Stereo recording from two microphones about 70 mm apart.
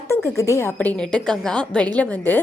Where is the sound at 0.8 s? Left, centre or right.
Left.